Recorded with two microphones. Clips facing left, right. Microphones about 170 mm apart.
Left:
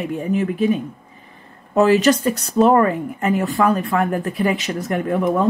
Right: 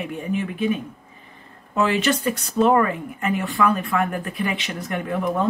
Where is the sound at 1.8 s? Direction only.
40° left (ahead or behind).